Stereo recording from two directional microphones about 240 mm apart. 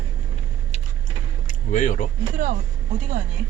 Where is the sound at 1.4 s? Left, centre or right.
Left.